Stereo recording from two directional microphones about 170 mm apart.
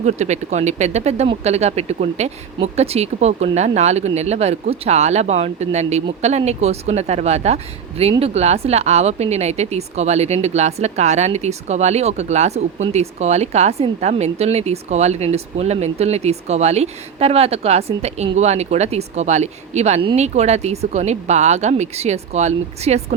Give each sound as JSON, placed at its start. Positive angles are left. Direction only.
{"t": 0.0, "sound": "a woman's voice", "side_deg": -40}